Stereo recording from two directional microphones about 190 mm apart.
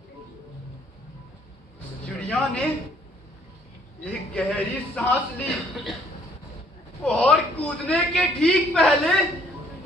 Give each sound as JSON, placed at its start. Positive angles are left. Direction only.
{"t": 2.0, "sound": "a sound", "side_deg": 5}
{"t": 4.0, "sound": "a man's voice", "side_deg": 5}
{"t": 7.0, "sound": "a man's voice", "side_deg": 5}